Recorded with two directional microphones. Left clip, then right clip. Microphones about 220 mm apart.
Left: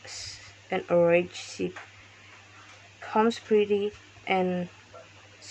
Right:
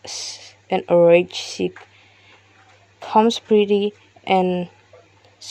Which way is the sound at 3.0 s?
35° right (ahead or behind).